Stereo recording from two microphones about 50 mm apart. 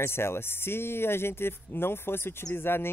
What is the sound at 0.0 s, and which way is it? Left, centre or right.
Speech, left.